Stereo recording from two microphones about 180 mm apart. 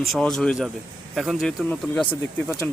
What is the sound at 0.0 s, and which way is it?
Speech, centre (ahead or behind).